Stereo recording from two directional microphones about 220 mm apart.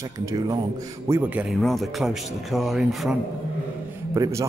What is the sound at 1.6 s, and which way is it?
Speech, centre (ahead or behind).